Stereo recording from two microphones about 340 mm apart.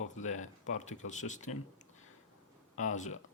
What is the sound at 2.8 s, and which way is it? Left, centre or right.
Speech, left.